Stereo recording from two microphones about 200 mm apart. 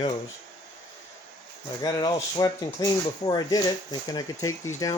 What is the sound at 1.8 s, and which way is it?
Speech, 20° left (ahead or behind).